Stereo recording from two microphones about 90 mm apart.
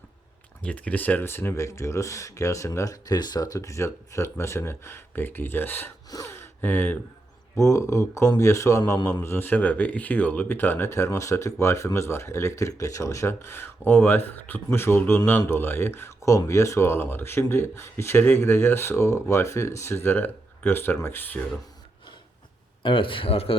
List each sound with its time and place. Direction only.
0.6 s speech: 15° left (ahead or behind)
6.2 s a sound: 25° left (ahead or behind)
7.5 s speech: 35° left (ahead or behind)
22.8 s a man's voice: 70° left (ahead or behind); by 23.6 s 90° left